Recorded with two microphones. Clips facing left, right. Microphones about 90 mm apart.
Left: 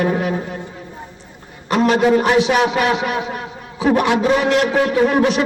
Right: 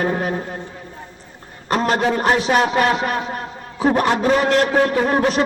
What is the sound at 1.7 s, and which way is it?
A man's voice, 40° right (ahead or behind).